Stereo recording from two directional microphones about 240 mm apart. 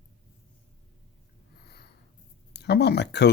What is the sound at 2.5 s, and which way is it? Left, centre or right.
Speech, left.